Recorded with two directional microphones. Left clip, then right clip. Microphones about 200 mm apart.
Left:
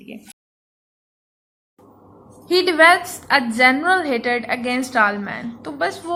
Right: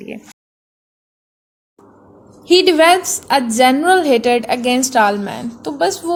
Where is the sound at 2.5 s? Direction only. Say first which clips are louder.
Right 3 dB; 40° right (ahead or behind).